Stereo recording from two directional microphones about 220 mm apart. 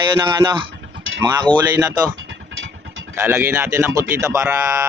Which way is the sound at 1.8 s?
15° right (ahead or behind).